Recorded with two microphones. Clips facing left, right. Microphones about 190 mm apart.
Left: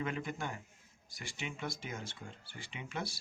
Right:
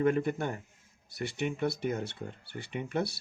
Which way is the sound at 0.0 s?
55° right (ahead or behind).